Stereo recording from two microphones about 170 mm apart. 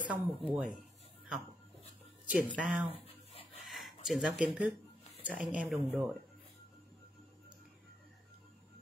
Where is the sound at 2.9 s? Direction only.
35° left (ahead or behind).